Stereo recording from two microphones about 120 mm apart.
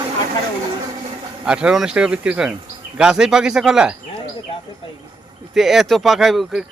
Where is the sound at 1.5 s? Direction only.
10° right (ahead or behind).